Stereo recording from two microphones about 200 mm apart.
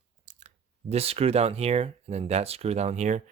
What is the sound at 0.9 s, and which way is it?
Speech, 30° right (ahead or behind).